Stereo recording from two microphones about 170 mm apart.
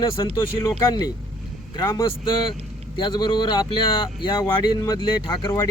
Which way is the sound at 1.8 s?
20° left (ahead or behind).